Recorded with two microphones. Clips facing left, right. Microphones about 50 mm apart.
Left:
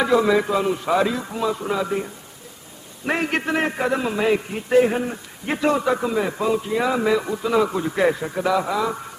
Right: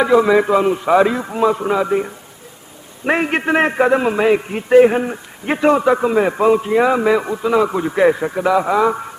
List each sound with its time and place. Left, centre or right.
0.0 s a man's voice: centre
3.1 s a man's voice: right
8.7 s a man's voice: right